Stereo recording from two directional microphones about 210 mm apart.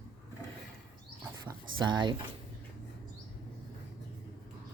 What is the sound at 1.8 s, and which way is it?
Speech, 20° right (ahead or behind).